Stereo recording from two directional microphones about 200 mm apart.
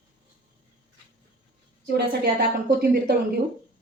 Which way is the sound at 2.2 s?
50° right (ahead or behind).